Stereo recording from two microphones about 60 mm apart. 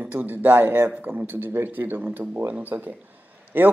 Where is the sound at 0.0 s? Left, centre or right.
Right.